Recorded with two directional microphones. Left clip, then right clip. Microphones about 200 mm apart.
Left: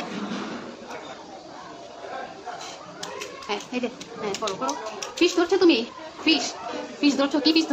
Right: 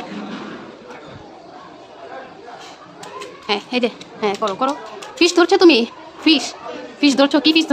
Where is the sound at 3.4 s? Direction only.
50° right (ahead or behind).